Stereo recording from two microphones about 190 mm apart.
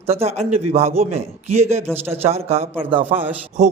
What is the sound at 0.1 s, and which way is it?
Speech, 35° right (ahead or behind).